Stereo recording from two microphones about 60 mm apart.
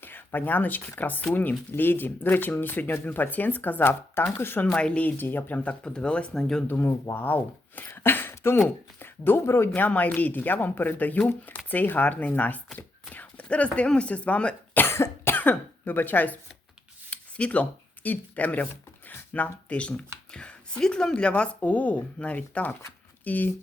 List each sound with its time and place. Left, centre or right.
0.0 s speech: left
4.6 s speech: left
5.1 s speech: left
5.8 s speech: centre
6.7 s speech: left
12.7 s a sound: left
13.7 s speech: centre
14.8 s speech: left